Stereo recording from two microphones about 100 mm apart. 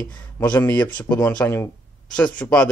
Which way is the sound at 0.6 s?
20° left (ahead or behind).